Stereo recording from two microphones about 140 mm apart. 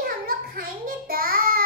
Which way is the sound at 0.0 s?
90° right.